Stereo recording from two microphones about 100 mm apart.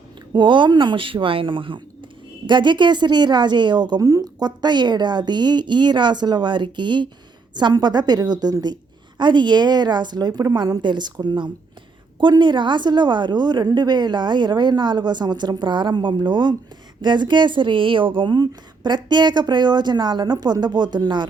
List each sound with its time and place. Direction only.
0.3 s a woman's voice: 50° right (ahead or behind)
4.0 s a woman's voice: 35° right (ahead or behind)